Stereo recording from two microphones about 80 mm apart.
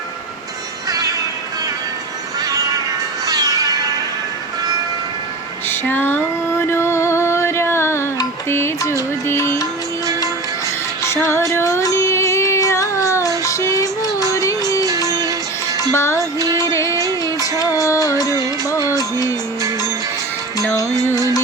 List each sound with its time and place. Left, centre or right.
0.9 s music: right
2.4 s music: right
5.6 s a sound: left
6.6 s music: left
11.0 s music: left
16.1 s music: right
16.6 s music of bollywood: left
17.6 s music: left